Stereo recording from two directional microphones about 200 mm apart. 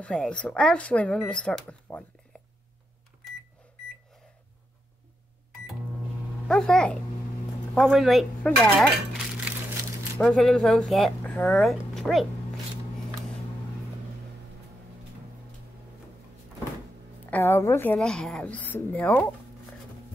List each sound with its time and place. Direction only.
0.0 s speech: 5° left (ahead or behind)
6.4 s speech: 5° left (ahead or behind)
10.1 s speech: centre (ahead or behind)
17.3 s speech: 10° left (ahead or behind)